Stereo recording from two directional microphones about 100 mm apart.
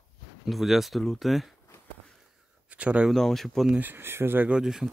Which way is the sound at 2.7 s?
15° right (ahead or behind).